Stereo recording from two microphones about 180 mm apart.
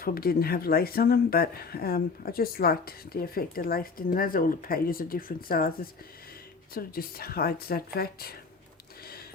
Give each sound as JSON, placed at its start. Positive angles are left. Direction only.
{"t": 0.0, "sound": "speech", "side_deg": 55}